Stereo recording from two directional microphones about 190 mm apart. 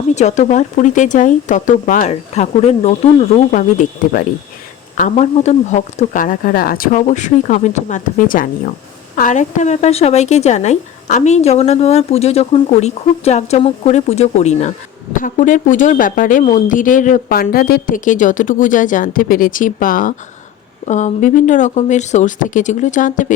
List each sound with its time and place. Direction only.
0.1 s a woman's voice: 35° left (ahead or behind)